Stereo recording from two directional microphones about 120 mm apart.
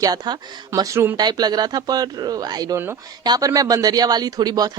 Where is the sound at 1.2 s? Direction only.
35° right (ahead or behind).